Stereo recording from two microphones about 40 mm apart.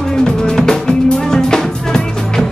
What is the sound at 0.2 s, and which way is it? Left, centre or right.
Music, centre.